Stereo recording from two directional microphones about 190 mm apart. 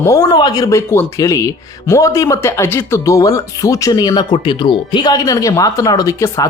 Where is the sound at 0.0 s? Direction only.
15° left (ahead or behind).